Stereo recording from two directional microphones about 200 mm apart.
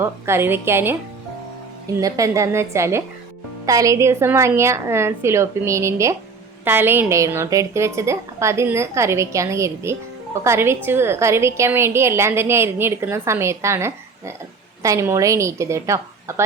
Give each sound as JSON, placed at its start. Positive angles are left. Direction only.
{"t": 0.0, "sound": "a woman's voice", "side_deg": -10}
{"t": 2.0, "sound": "a woman's voice", "side_deg": -15}